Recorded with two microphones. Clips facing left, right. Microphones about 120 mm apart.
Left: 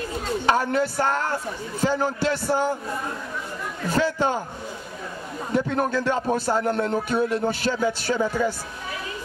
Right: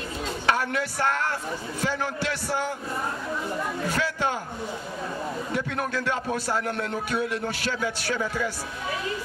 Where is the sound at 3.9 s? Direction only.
35° left (ahead or behind).